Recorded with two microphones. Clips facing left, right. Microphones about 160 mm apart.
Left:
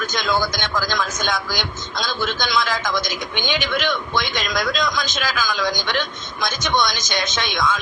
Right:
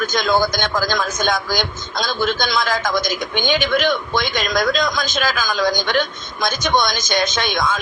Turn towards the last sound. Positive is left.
turn(degrees=-50)  # may be behind; listen again after turning